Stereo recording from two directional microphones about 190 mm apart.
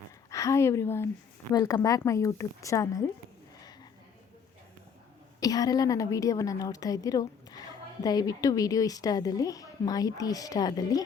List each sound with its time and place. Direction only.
0.3 s a woman's voice: 15° left (ahead or behind)
5.4 s a woman's voice: 20° left (ahead or behind)